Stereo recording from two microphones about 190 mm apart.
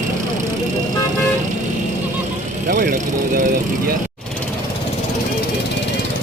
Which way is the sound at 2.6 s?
45° right (ahead or behind).